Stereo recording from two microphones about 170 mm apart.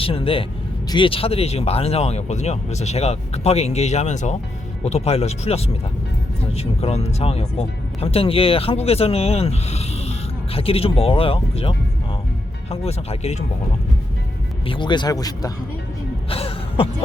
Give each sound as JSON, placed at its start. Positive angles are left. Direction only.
{"t": 0.0, "sound": "speech", "side_deg": 35}
{"t": 12.7, "sound": "speech", "side_deg": 35}
{"t": 14.7, "sound": "speech", "side_deg": 25}
{"t": 16.3, "sound": "music", "side_deg": 35}